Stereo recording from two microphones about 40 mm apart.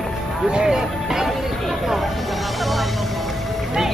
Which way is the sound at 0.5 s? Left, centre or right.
Centre.